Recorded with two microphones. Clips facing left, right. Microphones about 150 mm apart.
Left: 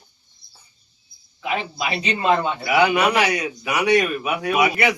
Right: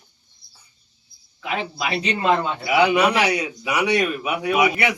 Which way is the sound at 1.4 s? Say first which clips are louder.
Left 1 dB; 5° left (ahead or behind).